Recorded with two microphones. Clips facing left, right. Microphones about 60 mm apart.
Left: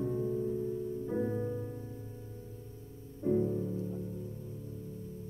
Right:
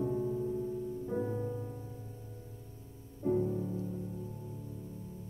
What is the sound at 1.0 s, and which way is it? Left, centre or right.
Music, centre.